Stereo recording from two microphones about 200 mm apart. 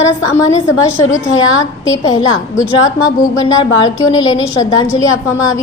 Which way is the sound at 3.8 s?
20° left (ahead or behind).